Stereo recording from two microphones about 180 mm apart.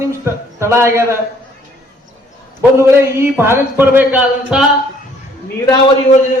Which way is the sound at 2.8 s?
15° right (ahead or behind).